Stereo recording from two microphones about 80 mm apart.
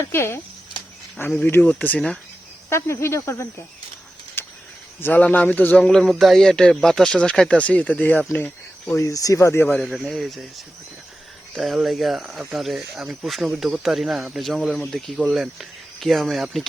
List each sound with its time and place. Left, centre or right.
0.0 s speech: left
1.5 s a man's voice: left
2.6 s speech: left
4.4 s cricket: left
4.9 s a man's voice: left
6.0 s speech: centre; by 9.0 s left
9.0 s speech: left
9.8 s speech: centre
11.5 s speech: centre